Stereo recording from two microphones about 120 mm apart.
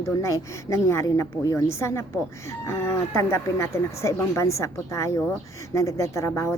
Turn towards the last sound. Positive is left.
turn(degrees=25)  # may be behind; listen again after turning